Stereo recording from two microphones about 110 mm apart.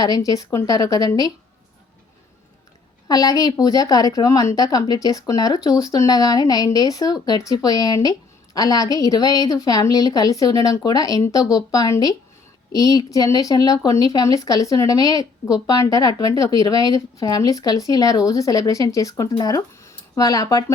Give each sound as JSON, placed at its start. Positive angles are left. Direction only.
{"t": 0.0, "sound": "speech", "side_deg": 35}
{"t": 3.1, "sound": "speech", "side_deg": 35}